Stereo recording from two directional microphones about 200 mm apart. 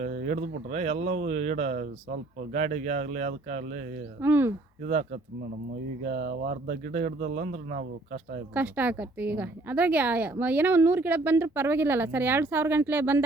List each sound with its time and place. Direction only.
0.0 s speech: 40° right (ahead or behind)
4.2 s a woman's voice: 10° right (ahead or behind)
4.9 s speech: 35° right (ahead or behind)
8.5 s a woman's voice: 10° right (ahead or behind)